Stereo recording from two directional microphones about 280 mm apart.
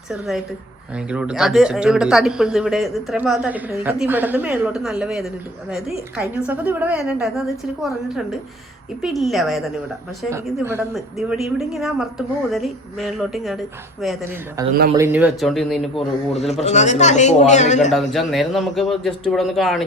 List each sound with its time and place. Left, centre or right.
0.1 s speech: centre
14.6 s speech: centre
16.5 s a man's voice: left
17.9 s speech: centre